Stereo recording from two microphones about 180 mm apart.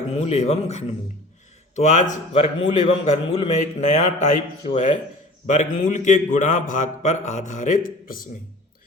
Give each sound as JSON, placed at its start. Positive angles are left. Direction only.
{"t": 0.1, "sound": "a man's voice", "side_deg": 35}